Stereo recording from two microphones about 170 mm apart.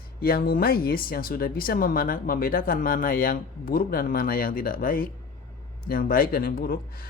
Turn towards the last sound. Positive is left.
turn(degrees=60)  # may be behind; listen again after turning